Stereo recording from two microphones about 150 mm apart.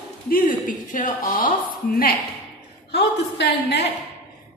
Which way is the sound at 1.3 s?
70° left (ahead or behind).